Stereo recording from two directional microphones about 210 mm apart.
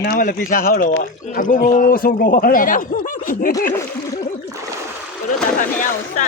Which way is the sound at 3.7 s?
15° left (ahead or behind).